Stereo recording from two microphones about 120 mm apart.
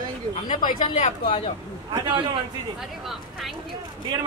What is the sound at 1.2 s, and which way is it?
Speech, 45° left (ahead or behind).